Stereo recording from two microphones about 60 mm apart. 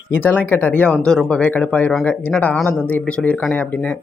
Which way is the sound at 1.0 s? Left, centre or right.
Centre.